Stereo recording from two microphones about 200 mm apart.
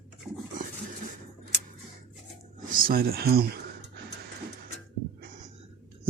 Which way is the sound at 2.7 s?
45° right (ahead or behind).